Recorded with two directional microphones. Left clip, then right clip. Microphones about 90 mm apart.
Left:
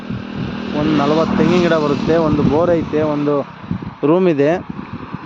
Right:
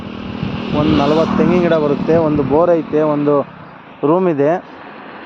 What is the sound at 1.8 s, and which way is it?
Speech, 5° left (ahead or behind).